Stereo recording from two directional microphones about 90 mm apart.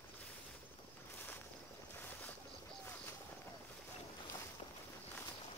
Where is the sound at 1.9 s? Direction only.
20° left (ahead or behind).